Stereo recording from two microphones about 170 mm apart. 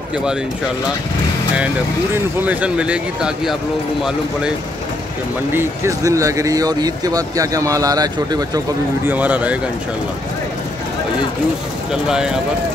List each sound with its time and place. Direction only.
2.4 s speech: 10° right (ahead or behind)
5.5 s speech: 15° right (ahead or behind)
9.1 s speech: 10° right (ahead or behind)
11.9 s speech: 5° right (ahead or behind)